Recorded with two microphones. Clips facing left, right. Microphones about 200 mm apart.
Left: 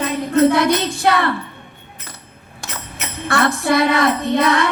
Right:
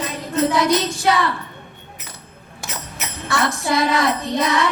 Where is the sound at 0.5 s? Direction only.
60° left (ahead or behind).